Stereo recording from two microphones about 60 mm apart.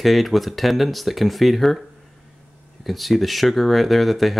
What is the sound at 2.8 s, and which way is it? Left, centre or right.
Speech, centre.